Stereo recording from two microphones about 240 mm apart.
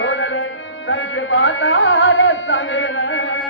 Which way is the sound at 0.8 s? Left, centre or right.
Left.